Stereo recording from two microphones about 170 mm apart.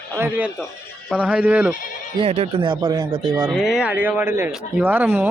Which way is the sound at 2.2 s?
35° right (ahead or behind).